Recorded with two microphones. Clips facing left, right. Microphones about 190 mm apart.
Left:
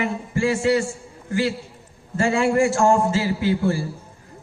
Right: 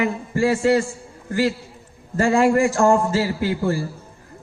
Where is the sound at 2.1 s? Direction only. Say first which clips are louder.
Right 3 dB; 40° right (ahead or behind).